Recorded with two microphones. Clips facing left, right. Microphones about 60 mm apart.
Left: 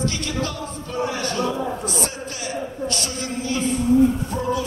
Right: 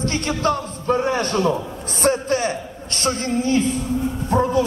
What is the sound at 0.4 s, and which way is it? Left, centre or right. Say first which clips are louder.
A man's voice: right 6 dB; right.